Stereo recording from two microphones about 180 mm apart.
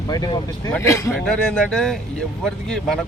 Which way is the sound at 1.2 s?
5° left (ahead or behind).